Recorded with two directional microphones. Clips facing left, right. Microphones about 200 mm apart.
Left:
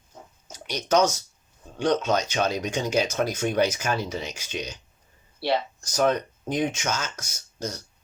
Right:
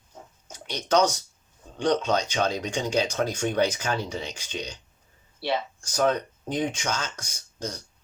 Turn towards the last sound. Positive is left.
turn(degrees=10)  # may be behind; listen again after turning